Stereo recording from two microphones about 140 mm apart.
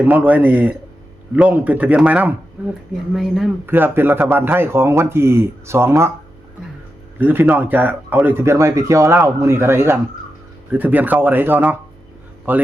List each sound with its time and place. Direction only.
0.0 s speech: 10° right (ahead or behind)
3.7 s speech: 15° right (ahead or behind)
7.2 s speech: 10° right (ahead or behind)